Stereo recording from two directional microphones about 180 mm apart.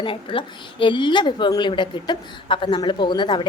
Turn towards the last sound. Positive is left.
turn(degrees=25)  # may be behind; listen again after turning